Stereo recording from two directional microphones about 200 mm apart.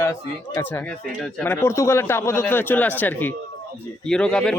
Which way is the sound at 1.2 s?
10° left (ahead or behind).